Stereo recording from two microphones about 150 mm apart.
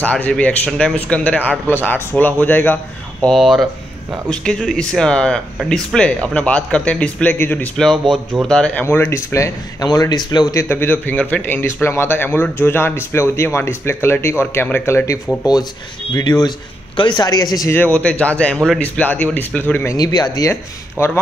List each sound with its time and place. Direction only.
0.0 s speech: 10° left (ahead or behind)
16.2 s speech: 25° left (ahead or behind)
17.7 s speech: 10° left (ahead or behind)
20.0 s speech: 25° left (ahead or behind)